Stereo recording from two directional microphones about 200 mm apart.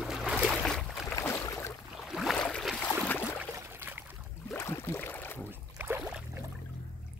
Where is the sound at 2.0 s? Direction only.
Centre (ahead or behind).